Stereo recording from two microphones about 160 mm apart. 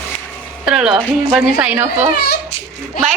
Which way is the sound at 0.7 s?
5° right (ahead or behind).